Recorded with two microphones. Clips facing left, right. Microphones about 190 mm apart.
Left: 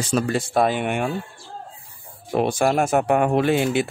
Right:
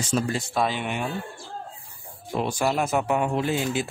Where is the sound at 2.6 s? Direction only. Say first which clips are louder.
Left 4 dB; 55° left (ahead or behind).